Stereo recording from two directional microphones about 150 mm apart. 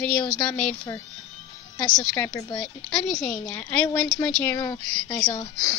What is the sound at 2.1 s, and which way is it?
Speech, 25° left (ahead or behind).